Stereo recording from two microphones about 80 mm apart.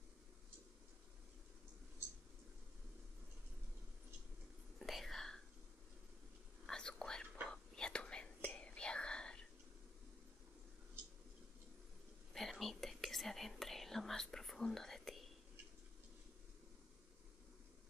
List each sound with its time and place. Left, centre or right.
4.7 s whispering: centre
6.6 s whispering: centre
12.4 s whispering: centre